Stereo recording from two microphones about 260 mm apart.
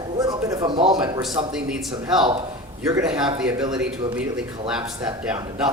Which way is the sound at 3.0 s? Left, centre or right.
Centre.